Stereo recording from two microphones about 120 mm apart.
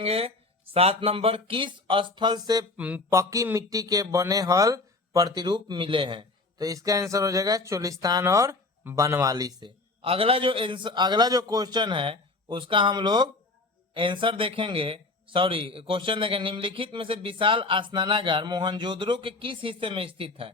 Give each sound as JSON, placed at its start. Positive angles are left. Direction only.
{"t": 0.0, "sound": "speech", "side_deg": -55}
{"t": 2.7, "sound": "speech", "side_deg": -10}
{"t": 3.1, "sound": "speech", "side_deg": -25}
{"t": 10.0, "sound": "a man's voice", "side_deg": -50}